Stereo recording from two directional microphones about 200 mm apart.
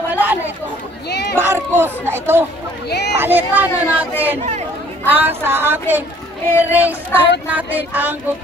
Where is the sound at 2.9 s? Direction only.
55° left (ahead or behind).